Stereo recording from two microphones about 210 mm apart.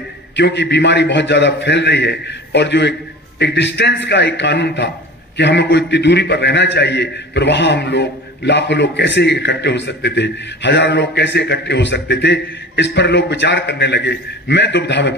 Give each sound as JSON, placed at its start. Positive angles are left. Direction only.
{"t": 0.4, "sound": "a man's voice", "side_deg": 55}